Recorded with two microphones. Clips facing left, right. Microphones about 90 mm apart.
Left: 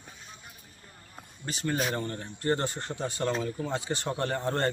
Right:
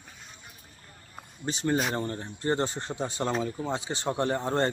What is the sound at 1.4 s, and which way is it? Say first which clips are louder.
Speech: right 3 dB; 25° right (ahead or behind).